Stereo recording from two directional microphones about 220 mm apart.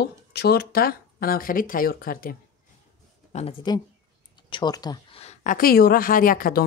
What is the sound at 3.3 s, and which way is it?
Speech, 30° left (ahead or behind).